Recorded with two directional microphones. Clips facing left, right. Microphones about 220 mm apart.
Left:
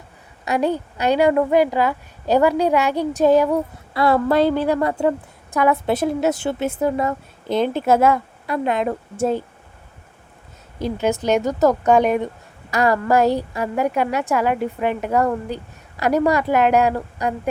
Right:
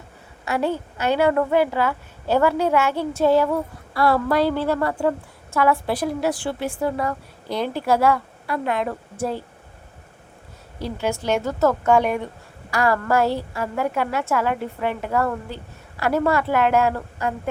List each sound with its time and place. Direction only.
0.4 s a woman's voice: 15° left (ahead or behind)
10.8 s a woman's voice: 20° left (ahead or behind)